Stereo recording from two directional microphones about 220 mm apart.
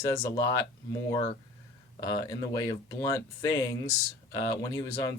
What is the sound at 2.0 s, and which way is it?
Speech, 15° left (ahead or behind).